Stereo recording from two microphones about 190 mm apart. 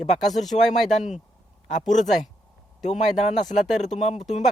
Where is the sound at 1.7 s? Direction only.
40° left (ahead or behind).